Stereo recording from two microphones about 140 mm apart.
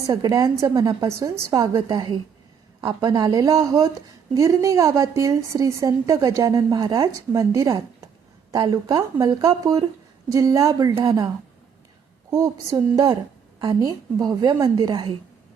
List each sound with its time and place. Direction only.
0.1 s a woman's voice: 25° right (ahead or behind)
12.3 s a woman's voice: 25° right (ahead or behind)